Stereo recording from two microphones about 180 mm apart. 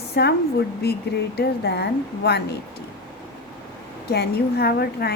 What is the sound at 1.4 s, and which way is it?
A woman's voice, 65° left (ahead or behind).